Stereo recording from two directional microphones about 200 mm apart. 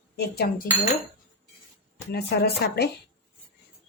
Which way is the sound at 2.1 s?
55° left (ahead or behind).